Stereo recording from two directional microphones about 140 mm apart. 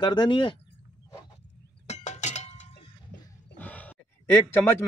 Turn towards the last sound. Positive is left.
turn(degrees=15)  # may be behind; listen again after turning